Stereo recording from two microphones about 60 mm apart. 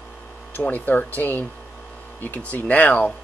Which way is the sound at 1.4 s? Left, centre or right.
Left.